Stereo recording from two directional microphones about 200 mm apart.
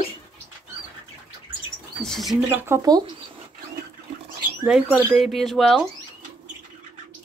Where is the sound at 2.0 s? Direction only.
Centre (ahead or behind).